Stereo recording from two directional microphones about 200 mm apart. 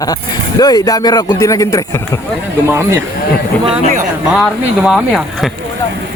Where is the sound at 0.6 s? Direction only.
20° left (ahead or behind).